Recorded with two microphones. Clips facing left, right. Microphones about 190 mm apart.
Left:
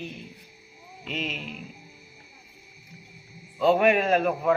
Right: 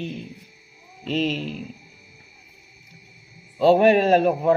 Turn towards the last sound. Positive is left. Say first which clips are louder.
# right 5 dB
turn(degrees=-30)  # may be behind; listen again after turning